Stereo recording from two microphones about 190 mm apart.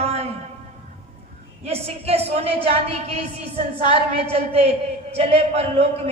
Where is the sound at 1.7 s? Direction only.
30° right (ahead or behind).